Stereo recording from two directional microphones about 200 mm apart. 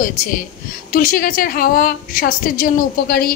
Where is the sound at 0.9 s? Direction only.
45° left (ahead or behind).